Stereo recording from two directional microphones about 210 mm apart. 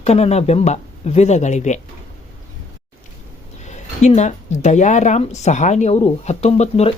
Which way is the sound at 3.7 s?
35° left (ahead or behind).